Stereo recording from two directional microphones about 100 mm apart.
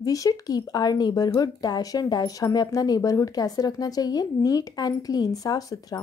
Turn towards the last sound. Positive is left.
turn(degrees=40)  # may be behind; listen again after turning